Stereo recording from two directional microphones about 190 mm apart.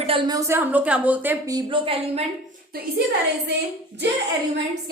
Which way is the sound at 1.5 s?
25° right (ahead or behind).